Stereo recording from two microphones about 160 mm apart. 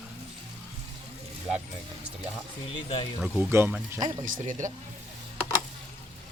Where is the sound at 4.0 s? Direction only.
55° right (ahead or behind).